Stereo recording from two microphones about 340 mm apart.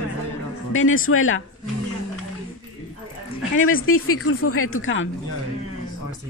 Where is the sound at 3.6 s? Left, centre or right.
Left.